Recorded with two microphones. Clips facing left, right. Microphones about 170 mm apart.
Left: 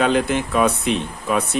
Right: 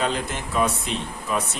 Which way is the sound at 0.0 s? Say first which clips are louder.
Left 8 dB; 70° left (ahead or behind).